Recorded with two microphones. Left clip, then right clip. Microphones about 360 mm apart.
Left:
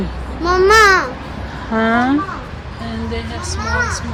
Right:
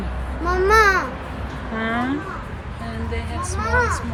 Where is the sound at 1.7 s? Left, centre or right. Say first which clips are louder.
Left 9 dB; centre.